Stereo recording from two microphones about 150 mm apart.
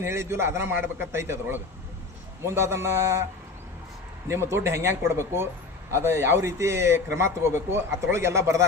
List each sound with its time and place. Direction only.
0.0 s a man's voice: 15° right (ahead or behind)
4.3 s a man's voice: 15° right (ahead or behind)